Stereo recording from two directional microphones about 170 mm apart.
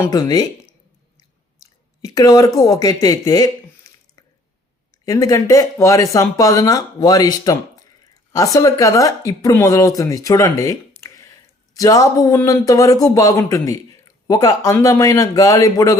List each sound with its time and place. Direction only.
0.0 s speech: 20° left (ahead or behind)
2.0 s speech: 20° left (ahead or behind)